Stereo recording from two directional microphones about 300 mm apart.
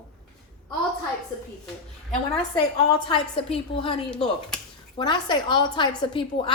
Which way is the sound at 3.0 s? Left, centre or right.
Centre.